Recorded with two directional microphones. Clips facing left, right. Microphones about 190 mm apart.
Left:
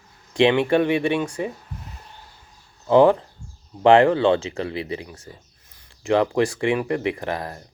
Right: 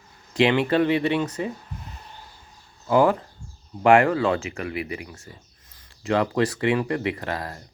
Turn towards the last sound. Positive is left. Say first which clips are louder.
# left 2 dB
turn(degrees=20)  # may be behind; listen again after turning